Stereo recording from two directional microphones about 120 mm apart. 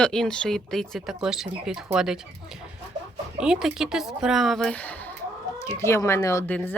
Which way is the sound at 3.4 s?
5° right (ahead or behind).